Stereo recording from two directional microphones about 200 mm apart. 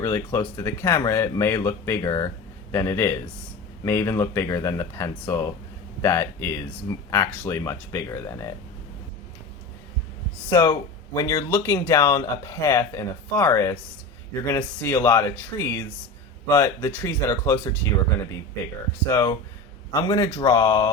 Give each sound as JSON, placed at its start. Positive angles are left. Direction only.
{"t": 0.0, "sound": "speech", "side_deg": 15}
{"t": 10.5, "sound": "speech", "side_deg": 20}
{"t": 19.1, "sound": "speech", "side_deg": 15}